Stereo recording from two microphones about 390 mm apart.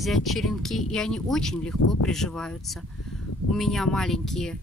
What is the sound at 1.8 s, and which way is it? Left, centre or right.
Speech, left.